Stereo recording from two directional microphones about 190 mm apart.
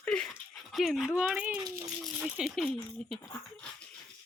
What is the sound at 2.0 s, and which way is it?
A child's voice, centre (ahead or behind).